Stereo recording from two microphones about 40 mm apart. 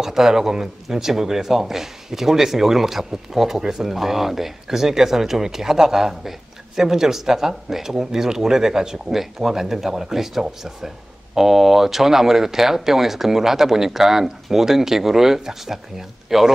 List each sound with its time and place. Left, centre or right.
0.0 s speech: centre